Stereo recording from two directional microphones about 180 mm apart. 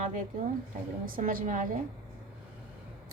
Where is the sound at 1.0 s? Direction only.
50° right (ahead or behind).